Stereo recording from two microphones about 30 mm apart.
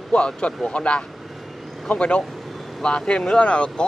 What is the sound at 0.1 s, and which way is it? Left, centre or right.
Speech, left.